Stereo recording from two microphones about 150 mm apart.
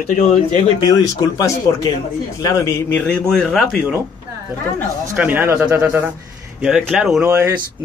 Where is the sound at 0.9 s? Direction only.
25° left (ahead or behind); by 3.8 s centre (ahead or behind).